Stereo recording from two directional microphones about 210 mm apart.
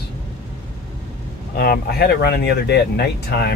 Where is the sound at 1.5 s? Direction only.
45° left (ahead or behind).